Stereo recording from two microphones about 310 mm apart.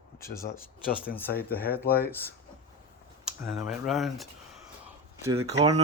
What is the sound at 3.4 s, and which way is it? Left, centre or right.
Speech, centre.